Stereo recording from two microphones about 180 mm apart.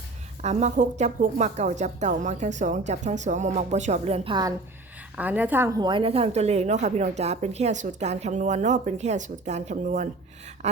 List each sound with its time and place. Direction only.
0.4 s a woman's voice: 40° right (ahead or behind)
5.1 s a woman's voice: 10° right (ahead or behind)
5.8 s a woman's voice: 30° right (ahead or behind)